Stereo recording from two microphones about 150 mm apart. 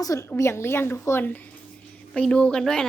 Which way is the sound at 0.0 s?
20° left (ahead or behind).